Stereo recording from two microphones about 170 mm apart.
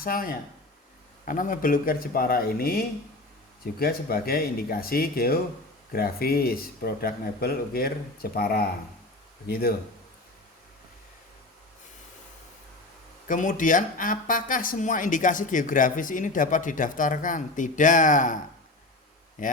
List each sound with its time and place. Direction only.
0.0 s speech: 55° left (ahead or behind)
13.2 s speech: 50° left (ahead or behind)
19.4 s speech: 50° left (ahead or behind)